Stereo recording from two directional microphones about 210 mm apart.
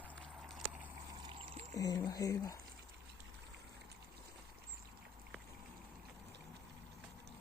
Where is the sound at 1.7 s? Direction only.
15° left (ahead or behind).